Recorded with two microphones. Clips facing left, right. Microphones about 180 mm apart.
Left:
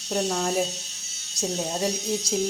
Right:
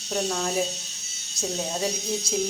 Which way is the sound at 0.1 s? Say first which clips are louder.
Left 2 dB; 10° left (ahead or behind).